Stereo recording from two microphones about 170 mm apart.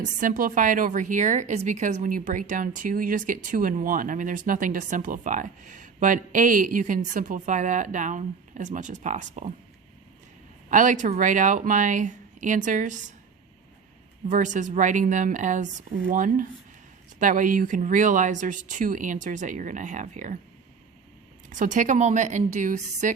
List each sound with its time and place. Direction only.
0.0 s a woman's voice: 50° right (ahead or behind)
10.7 s a woman's voice: 50° right (ahead or behind)
14.3 s a woman's voice: 50° right (ahead or behind)
21.5 s a woman's voice: 50° right (ahead or behind)